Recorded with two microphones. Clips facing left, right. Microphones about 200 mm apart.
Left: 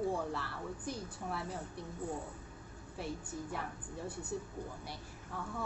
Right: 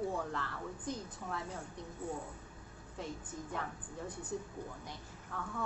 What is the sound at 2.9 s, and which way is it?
A woman's voice, 10° left (ahead or behind).